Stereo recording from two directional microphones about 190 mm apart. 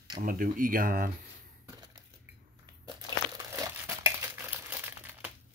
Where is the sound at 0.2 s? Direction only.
50° right (ahead or behind).